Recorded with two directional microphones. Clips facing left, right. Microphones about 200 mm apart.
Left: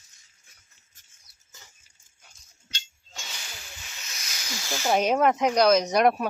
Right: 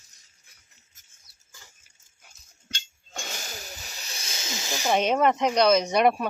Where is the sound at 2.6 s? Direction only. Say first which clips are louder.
Right 3 dB; 55° right (ahead or behind); by 4.8 s 20° right (ahead or behind).